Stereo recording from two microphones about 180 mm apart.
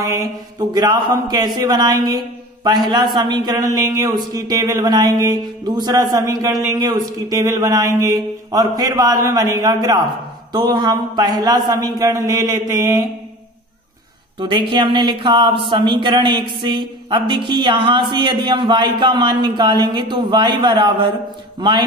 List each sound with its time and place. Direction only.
0.0 s speech: 20° right (ahead or behind)
14.4 s speech: 25° right (ahead or behind)